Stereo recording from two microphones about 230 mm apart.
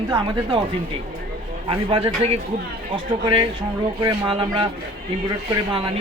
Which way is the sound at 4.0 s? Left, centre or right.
Centre.